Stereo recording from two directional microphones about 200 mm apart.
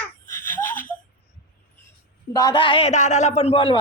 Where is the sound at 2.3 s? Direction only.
20° left (ahead or behind).